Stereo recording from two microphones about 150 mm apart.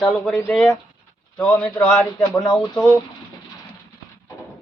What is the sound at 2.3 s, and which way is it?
Speech, 25° left (ahead or behind).